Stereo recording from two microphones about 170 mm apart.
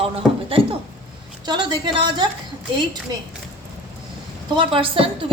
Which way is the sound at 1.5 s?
25° right (ahead or behind).